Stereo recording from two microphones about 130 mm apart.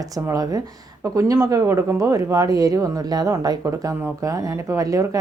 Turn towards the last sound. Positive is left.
turn(degrees=-25)  # may be behind; listen again after turning